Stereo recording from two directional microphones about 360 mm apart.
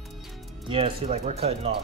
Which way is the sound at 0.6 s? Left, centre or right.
Centre.